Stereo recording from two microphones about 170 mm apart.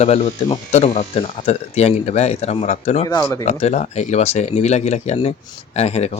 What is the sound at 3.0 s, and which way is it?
Speech, 20° left (ahead or behind).